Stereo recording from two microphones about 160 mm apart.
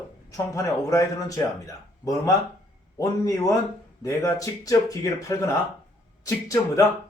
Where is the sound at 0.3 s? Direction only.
20° left (ahead or behind).